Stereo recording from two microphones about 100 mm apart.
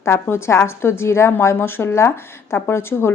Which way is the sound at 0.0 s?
25° left (ahead or behind).